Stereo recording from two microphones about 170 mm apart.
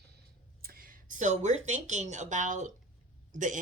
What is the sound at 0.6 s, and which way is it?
Speech, 60° right (ahead or behind).